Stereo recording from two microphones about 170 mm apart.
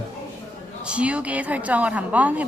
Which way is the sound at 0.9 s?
5° right (ahead or behind).